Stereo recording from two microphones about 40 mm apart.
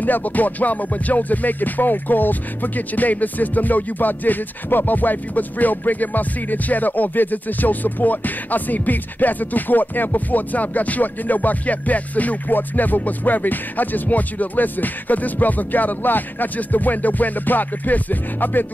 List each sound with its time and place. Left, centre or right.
0.0 s music: left